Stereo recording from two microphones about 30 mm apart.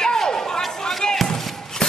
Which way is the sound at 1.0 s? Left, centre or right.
Left.